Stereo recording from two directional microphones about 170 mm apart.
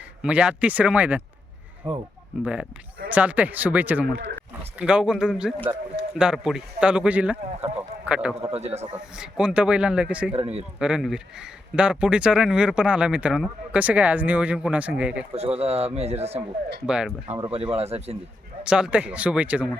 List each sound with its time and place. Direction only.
0.2 s speech: 5° right (ahead or behind)
1.8 s speech: 25° right (ahead or behind)
2.4 s a man's voice: 5° right (ahead or behind)
7.8 s a sound: 5° right (ahead or behind)
8.4 s speech: 40° right (ahead or behind)
9.1 s a man's voice: 5° right (ahead or behind)
10.3 s speech: 35° right (ahead or behind)
10.8 s speech: 5° right (ahead or behind)
15.5 s speech: 40° right (ahead or behind)
16.8 s a man's voice: 5° right (ahead or behind)
17.5 s speech: 35° right (ahead or behind)
18.6 s speech: 5° right (ahead or behind)